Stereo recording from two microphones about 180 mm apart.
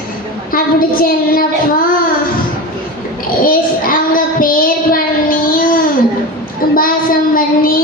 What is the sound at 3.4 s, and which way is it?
Child singing, 50° left (ahead or behind).